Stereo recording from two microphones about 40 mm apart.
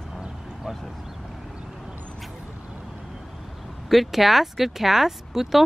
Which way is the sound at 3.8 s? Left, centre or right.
Centre.